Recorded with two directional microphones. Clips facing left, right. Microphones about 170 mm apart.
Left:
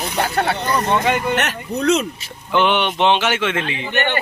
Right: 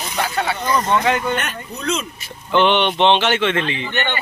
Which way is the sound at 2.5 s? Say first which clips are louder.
Right 2 dB; 10° left (ahead or behind).